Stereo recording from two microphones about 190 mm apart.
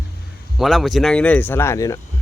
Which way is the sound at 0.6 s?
Centre (ahead or behind).